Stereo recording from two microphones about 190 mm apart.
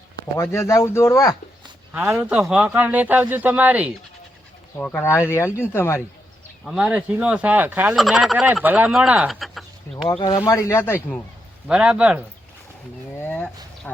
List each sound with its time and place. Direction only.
0.3 s speech: 15° left (ahead or behind)
1.9 s speech: 10° right (ahead or behind)
4.8 s speech: 10° left (ahead or behind)
6.7 s speech: 5° right (ahead or behind)
10.2 s speech: 25° left (ahead or behind)
11.7 s speech: 5° right (ahead or behind)
13.1 s speech: 10° left (ahead or behind)